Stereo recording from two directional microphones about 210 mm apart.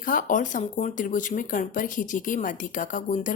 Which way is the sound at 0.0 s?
40° left (ahead or behind).